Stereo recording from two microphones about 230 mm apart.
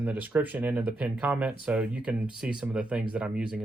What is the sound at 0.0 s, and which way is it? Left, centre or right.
Speech, centre.